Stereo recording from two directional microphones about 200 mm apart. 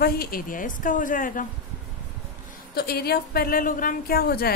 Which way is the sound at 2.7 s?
50° left (ahead or behind).